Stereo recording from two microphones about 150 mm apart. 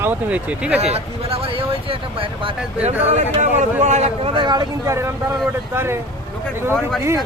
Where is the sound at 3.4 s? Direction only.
50° right (ahead or behind); by 6.0 s 15° right (ahead or behind).